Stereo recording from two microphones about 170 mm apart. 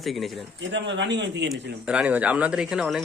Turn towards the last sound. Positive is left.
turn(degrees=-5)  # may be behind; listen again after turning